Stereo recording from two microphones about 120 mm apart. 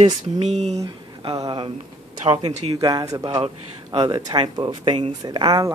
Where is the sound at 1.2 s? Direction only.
35° right (ahead or behind).